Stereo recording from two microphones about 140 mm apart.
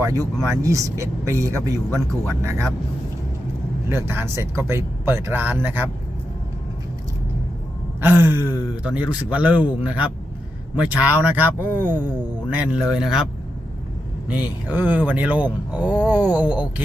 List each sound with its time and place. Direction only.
0.5 s speech: 20° right (ahead or behind)
3.8 s speech: 15° right (ahead or behind)
8.0 s speech: 15° right (ahead or behind)
14.3 s speech: 10° right (ahead or behind)